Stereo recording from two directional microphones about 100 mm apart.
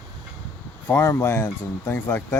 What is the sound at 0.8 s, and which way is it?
Speech, 25° left (ahead or behind).